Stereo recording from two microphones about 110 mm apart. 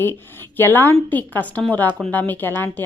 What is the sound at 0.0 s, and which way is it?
Speech, 20° left (ahead or behind).